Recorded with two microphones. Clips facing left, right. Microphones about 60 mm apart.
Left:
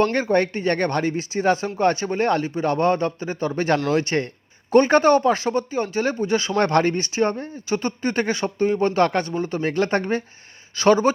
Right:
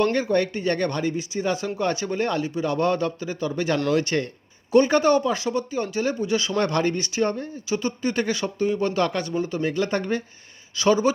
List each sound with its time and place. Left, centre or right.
0.0 s speech: left
4.7 s speech: left